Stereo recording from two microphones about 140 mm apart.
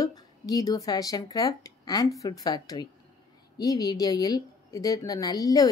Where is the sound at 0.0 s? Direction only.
25° left (ahead or behind).